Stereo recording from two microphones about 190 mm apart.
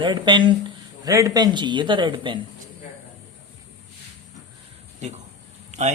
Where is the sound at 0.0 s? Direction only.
25° right (ahead or behind).